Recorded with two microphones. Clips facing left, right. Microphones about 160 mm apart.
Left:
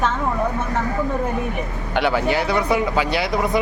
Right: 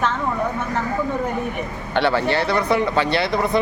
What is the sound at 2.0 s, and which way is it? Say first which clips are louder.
Speech: even; 10° left (ahead or behind).